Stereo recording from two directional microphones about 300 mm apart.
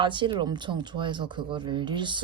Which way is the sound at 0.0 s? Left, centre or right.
Centre.